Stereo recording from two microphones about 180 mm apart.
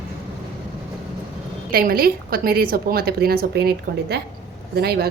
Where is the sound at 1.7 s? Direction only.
55° right (ahead or behind).